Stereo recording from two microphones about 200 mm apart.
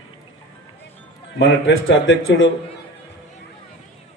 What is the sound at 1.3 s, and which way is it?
A man's voice, 70° left (ahead or behind).